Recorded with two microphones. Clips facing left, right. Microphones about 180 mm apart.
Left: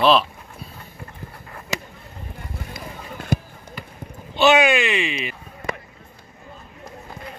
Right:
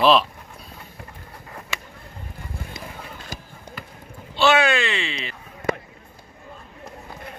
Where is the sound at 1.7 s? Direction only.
40° left (ahead or behind).